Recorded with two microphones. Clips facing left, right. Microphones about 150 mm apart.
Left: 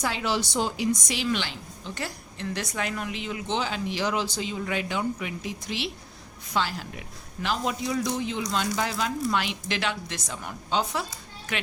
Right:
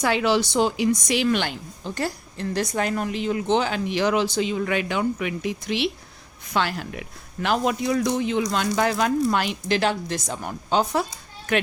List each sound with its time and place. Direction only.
0.0 s a woman's voice: 70° right (ahead or behind); by 11.0 s 45° right (ahead or behind)